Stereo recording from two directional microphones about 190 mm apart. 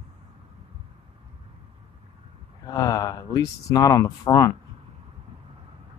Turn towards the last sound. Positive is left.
turn(degrees=20)  # may be behind; listen again after turning